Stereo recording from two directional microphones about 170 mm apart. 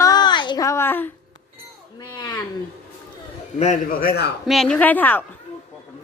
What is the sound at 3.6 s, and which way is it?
Speech, 45° left (ahead or behind).